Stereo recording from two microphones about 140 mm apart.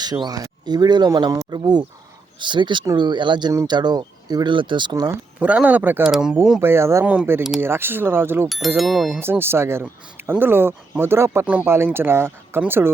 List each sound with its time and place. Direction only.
0.3 s speech: 25° right (ahead or behind)
5.4 s speech: 10° right (ahead or behind)
6.6 s speech: 20° right (ahead or behind)
8.4 s speech: centre (ahead or behind)
9.2 s speech: 15° right (ahead or behind)